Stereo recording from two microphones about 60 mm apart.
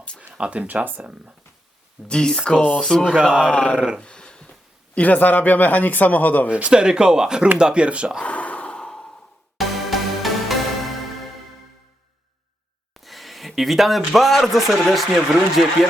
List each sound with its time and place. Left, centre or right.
0.3 s speech: centre
2.0 s speech: centre
2.6 s speech: centre
3.5 s speech: centre
4.0 s a sound: centre
4.9 s speech: left
6.5 s speech: centre
8.2 s a sound: left
9.6 s music: centre
13.0 s speech: centre